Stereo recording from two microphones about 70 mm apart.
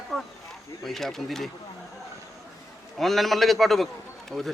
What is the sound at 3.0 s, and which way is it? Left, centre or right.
Speech, centre.